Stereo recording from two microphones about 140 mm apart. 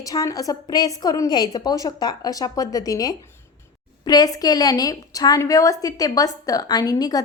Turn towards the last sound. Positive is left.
turn(degrees=25)  # may be behind; listen again after turning